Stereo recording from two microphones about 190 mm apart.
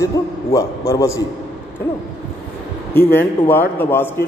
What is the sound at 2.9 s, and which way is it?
A man's voice, 10° left (ahead or behind).